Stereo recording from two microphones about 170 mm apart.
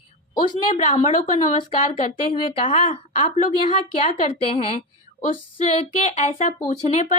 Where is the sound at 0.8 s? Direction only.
45° left (ahead or behind).